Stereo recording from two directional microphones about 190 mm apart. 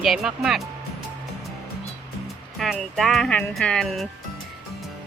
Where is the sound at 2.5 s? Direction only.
Centre (ahead or behind).